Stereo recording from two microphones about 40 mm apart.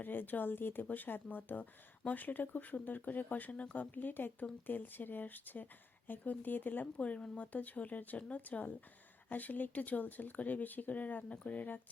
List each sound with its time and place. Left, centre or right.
0.0 s speech: left
6.9 s speech: left